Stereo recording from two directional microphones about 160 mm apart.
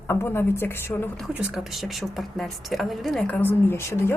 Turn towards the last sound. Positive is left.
turn(degrees=15)  # may be behind; listen again after turning